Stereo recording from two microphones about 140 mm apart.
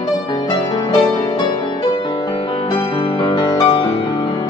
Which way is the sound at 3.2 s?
40° left (ahead or behind).